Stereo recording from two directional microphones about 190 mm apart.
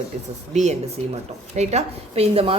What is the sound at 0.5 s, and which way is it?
A woman's voice, 35° right (ahead or behind).